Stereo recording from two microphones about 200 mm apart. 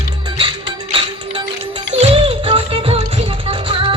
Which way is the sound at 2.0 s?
25° right (ahead or behind).